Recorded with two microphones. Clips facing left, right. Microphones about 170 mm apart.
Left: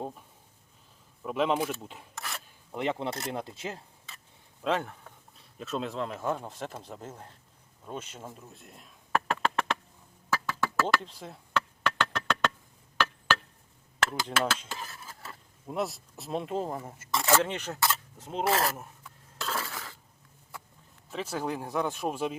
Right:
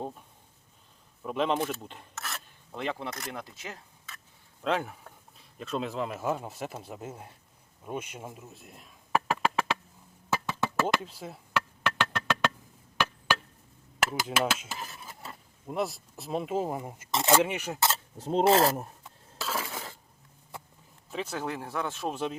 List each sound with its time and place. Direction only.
0.0 s speech: centre (ahead or behind)
2.7 s speech: 20° left (ahead or behind)
4.6 s speech: centre (ahead or behind)
7.9 s a sound: 10° right (ahead or behind)
10.2 s a sound: 20° right (ahead or behind)
11.0 s chop: 5° right (ahead or behind)
14.0 s speech: 10° right (ahead or behind)
15.6 s speech: centre (ahead or behind)
17.7 s speech: 25° right (ahead or behind)
19.4 s a sound: 5° right (ahead or behind)
19.6 s a sound: 20° right (ahead or behind)
21.1 s speech: 5° left (ahead or behind)